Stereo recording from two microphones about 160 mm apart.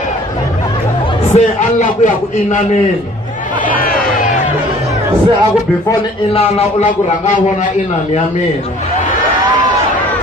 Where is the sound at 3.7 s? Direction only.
65° left (ahead or behind).